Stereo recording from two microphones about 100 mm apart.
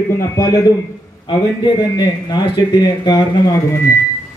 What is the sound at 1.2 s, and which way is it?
A man's voice, 50° left (ahead or behind).